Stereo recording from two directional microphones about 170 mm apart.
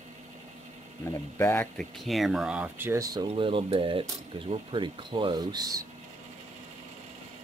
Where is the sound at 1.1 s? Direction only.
15° left (ahead or behind).